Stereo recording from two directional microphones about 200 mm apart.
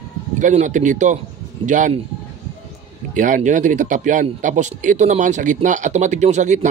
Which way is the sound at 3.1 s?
40° right (ahead or behind).